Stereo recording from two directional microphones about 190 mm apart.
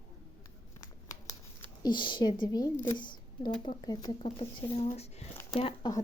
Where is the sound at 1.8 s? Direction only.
25° left (ahead or behind).